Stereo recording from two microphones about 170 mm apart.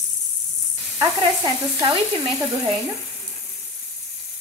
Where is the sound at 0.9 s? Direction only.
25° right (ahead or behind).